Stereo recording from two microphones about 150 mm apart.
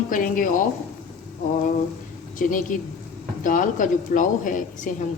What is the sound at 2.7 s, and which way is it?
Speech, 60° left (ahead or behind).